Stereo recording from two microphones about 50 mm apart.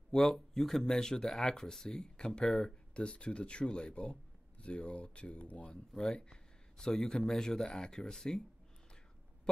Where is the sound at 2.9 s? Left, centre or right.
Left.